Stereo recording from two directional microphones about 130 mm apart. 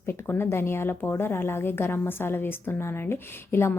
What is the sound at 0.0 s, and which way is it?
Speech, 15° left (ahead or behind).